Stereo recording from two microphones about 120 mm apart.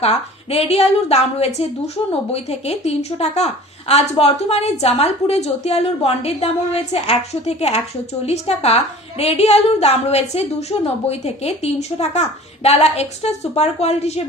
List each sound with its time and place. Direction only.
0.0 s a woman's voice: 60° left (ahead or behind)